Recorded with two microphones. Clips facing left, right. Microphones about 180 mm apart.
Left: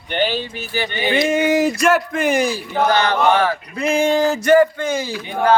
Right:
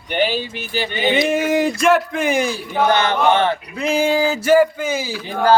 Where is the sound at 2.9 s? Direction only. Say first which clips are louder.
Even; 20° right (ahead or behind).